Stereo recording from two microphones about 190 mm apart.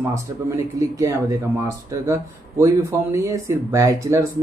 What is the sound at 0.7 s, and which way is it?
Speech, 15° right (ahead or behind).